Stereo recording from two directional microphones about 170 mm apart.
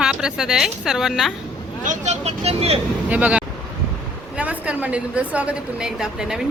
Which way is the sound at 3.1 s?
10° right (ahead or behind).